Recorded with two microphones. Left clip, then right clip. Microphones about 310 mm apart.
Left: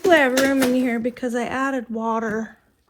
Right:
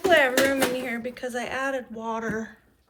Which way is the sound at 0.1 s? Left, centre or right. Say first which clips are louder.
Left 4 dB; centre.